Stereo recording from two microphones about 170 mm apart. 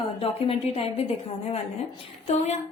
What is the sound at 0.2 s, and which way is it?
Speech, 35° left (ahead or behind).